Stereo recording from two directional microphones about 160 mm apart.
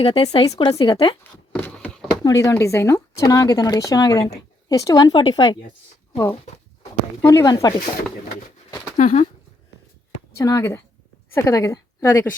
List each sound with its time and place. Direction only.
0.0 s speech: 35° left (ahead or behind)
0.4 s speech: 20° left (ahead or behind)
1.2 s a sound: 10° left (ahead or behind)
2.2 s speech: 20° left (ahead or behind)
7.2 s speech: 20° left (ahead or behind)
9.0 s speech: 45° left (ahead or behind)
10.3 s a woman's voice: 15° left (ahead or behind)